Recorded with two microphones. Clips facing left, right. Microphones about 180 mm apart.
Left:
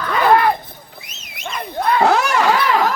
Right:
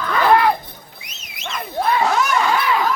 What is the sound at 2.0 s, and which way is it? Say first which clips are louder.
Crowd: left 3 dB; 70° left (ahead or behind).